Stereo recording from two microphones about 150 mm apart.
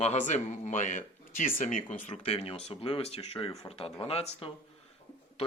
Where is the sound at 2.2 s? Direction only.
40° left (ahead or behind).